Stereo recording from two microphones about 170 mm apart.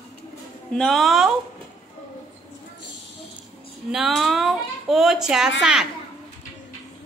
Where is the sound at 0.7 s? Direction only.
Centre (ahead or behind).